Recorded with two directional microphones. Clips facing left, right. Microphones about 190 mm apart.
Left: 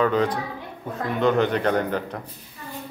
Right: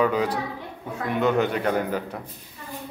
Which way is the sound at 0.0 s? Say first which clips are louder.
Left 1 dB; 10° right (ahead or behind).